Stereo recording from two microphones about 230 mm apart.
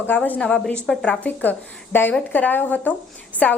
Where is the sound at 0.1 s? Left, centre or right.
Centre.